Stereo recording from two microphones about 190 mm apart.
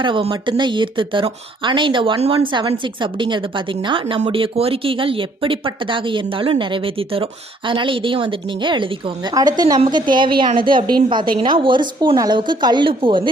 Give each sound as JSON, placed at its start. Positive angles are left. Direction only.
{"t": 0.0, "sound": "speech", "side_deg": -25}